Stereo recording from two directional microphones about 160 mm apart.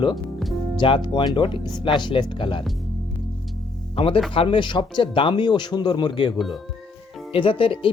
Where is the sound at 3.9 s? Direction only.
35° left (ahead or behind).